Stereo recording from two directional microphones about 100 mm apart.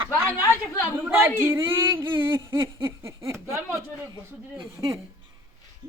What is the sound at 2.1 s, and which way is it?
Speech, 50° right (ahead or behind).